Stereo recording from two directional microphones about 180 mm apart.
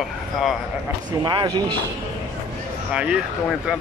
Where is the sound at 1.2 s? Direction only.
25° right (ahead or behind).